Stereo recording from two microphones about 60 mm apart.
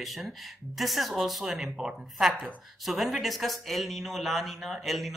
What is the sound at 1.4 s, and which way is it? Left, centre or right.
Speech, centre.